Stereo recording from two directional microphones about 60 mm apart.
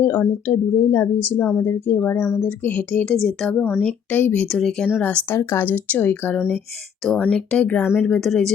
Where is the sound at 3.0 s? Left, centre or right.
Centre.